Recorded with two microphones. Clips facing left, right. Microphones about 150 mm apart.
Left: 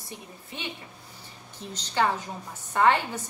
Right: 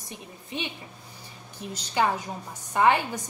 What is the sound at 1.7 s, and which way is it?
Speech, 10° right (ahead or behind).